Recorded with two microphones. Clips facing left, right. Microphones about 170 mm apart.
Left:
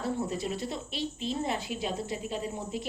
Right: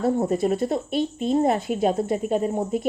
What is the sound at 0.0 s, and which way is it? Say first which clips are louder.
Speech: right 10 dB; 55° right (ahead or behind).